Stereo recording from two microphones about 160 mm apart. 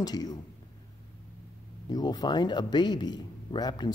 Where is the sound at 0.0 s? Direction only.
25° left (ahead or behind).